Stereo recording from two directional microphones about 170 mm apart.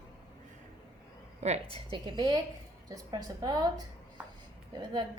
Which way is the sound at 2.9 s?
20° right (ahead or behind).